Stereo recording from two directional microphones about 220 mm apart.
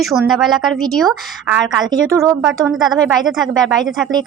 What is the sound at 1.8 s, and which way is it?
Speech, 15° right (ahead or behind).